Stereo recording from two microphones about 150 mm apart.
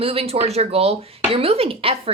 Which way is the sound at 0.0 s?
40° right (ahead or behind).